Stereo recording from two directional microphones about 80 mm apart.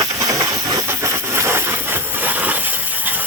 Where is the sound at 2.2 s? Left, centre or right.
Right.